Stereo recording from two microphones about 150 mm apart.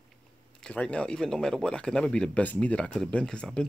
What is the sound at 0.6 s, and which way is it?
Speech, 5° left (ahead or behind).